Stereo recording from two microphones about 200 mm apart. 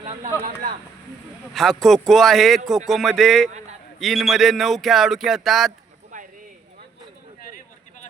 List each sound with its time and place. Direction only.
0.0 s speech: 30° right (ahead or behind)
1.5 s speech: centre (ahead or behind)
6.1 s a sound: 40° right (ahead or behind)